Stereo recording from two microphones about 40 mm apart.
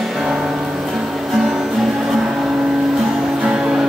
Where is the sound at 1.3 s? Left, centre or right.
Centre.